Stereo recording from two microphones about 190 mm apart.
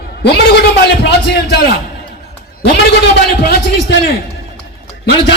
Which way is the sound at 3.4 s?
60° left (ahead or behind).